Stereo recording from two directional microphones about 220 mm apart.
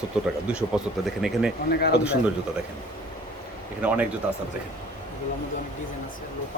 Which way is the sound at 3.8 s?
5° right (ahead or behind).